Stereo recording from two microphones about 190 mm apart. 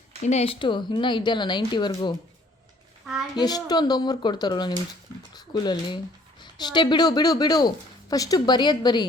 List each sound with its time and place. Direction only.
0.2 s speech: 35° left (ahead or behind)
3.3 s speech: 20° left (ahead or behind)